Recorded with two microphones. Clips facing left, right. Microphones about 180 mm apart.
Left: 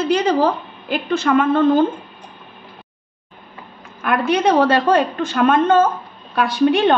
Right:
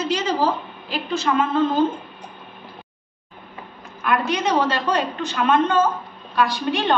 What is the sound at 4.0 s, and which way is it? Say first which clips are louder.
A woman's voice: left 4 dB; 55° left (ahead or behind).